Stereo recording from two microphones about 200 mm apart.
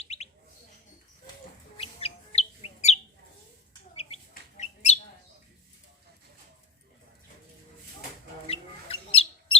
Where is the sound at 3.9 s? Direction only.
30° left (ahead or behind).